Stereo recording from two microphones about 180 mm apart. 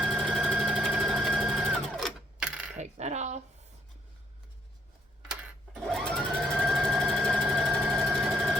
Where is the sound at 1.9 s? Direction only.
Centre (ahead or behind).